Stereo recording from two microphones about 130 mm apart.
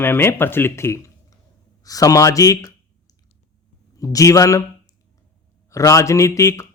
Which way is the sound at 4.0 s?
25° left (ahead or behind).